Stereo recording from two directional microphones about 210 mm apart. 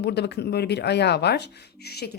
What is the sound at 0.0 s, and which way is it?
Speech, 55° left (ahead or behind).